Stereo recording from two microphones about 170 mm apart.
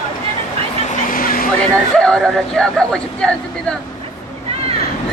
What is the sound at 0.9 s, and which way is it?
Vehicle, 55° left (ahead or behind).